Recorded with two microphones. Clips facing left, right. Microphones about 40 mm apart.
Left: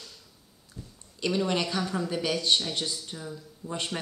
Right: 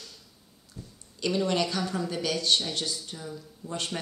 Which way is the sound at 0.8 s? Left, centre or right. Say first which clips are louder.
Even; centre.